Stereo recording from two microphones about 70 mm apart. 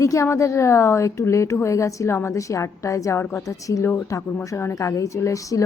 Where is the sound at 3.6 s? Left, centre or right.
Left.